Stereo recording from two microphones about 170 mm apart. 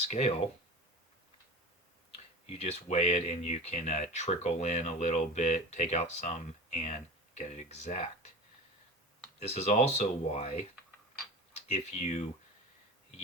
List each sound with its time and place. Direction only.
0.0 s speech: 40° left (ahead or behind)
2.1 s speech: 40° left (ahead or behind)
9.5 s speech: 40° left (ahead or behind)